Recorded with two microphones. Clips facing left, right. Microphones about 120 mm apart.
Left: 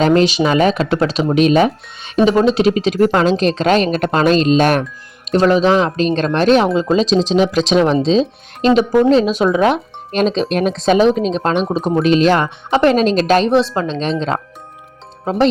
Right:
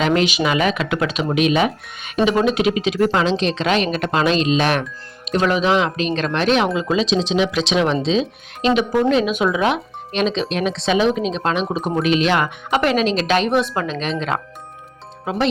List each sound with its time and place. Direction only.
0.0 s speech: 35° left (ahead or behind)
13.5 s speech: 30° left (ahead or behind)